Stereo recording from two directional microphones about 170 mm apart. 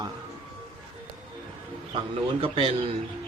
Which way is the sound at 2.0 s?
35° right (ahead or behind).